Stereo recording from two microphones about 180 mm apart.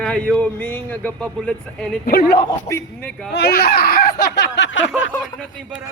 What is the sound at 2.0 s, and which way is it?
Speech, 60° left (ahead or behind).